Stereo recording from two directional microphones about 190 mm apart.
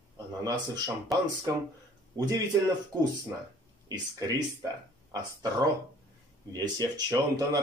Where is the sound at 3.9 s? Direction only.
20° right (ahead or behind).